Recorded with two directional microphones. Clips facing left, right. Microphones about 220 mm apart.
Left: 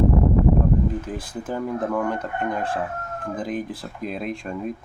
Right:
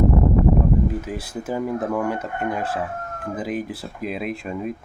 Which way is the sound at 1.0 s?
10° right (ahead or behind).